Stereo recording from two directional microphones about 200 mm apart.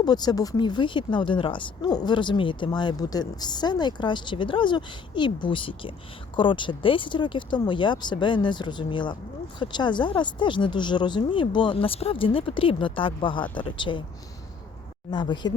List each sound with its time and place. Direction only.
0.0 s speech: 20° left (ahead or behind)
15.1 s speech: 20° left (ahead or behind)